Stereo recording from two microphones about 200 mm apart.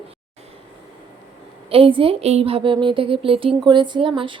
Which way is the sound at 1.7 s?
25° right (ahead or behind).